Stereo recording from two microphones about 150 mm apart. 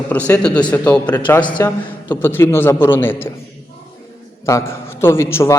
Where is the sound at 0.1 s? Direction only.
10° left (ahead or behind).